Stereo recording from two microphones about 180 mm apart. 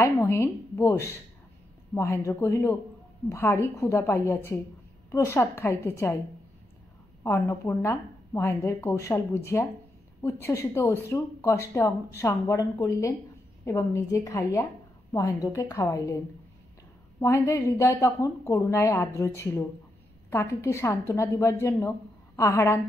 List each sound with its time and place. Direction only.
0.0 s a woman's voice: 15° left (ahead or behind)
7.2 s a woman's voice: 15° left (ahead or behind)
17.2 s a woman's voice: 15° left (ahead or behind)